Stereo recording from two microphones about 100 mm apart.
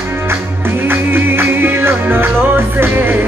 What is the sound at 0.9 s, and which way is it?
Music, 20° right (ahead or behind).